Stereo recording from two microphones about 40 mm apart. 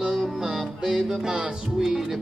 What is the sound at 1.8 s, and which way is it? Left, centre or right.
Music, centre.